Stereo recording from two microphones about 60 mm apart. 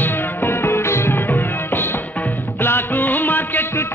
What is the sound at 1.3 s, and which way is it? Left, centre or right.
Music, left.